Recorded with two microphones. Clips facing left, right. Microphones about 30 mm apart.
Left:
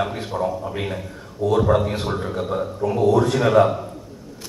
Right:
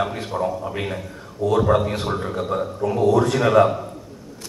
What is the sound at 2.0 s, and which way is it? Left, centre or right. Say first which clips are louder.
Speech: even; centre.